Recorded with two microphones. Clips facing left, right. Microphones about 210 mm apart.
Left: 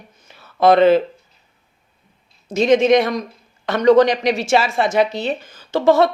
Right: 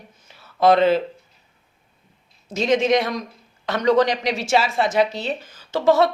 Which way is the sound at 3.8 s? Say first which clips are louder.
Left 6 dB; 55° left (ahead or behind).